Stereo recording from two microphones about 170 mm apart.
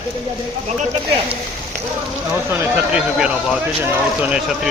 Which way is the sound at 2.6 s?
5° right (ahead or behind).